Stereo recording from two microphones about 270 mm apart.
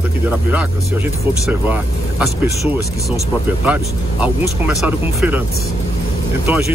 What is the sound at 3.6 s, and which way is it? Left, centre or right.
Speech, centre.